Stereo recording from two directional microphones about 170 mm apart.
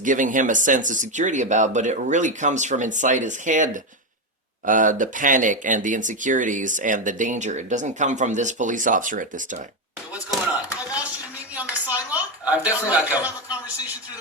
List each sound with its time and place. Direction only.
0.0 s speech: 50° right (ahead or behind)
10.5 s a sound: 10° right (ahead or behind)
12.6 s a man's voice: 10° right (ahead or behind)